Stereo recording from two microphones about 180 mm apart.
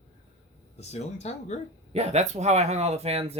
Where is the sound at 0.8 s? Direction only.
35° left (ahead or behind).